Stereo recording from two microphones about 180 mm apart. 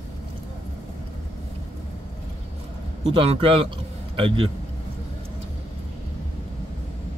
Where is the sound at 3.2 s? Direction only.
30° right (ahead or behind).